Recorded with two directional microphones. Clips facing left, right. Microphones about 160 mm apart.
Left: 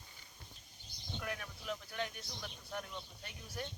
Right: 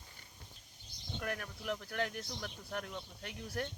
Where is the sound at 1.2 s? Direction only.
55° right (ahead or behind).